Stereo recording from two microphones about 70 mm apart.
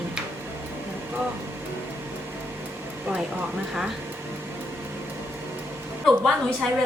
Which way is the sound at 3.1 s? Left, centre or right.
Right.